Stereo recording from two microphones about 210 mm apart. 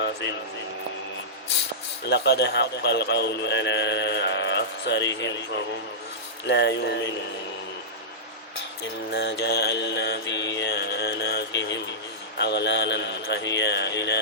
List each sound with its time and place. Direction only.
2.0 s a man's voice: 50° left (ahead or behind)
6.5 s mantra: 55° left (ahead or behind)
8.8 s mantra: 50° left (ahead or behind)
12.4 s a man's voice: 55° left (ahead or behind)